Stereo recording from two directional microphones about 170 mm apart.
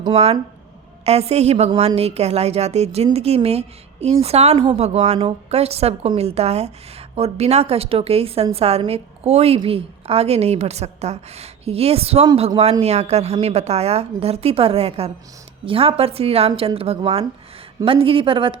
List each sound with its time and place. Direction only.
0.0 s a woman's voice: 35° right (ahead or behind)
4.5 s a woman's voice: 25° right (ahead or behind)
4.8 s a woman's voice: 40° right (ahead or behind)